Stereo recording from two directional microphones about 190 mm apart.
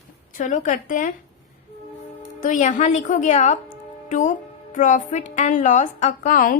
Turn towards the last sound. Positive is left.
turn(degrees=45)  # may be behind; listen again after turning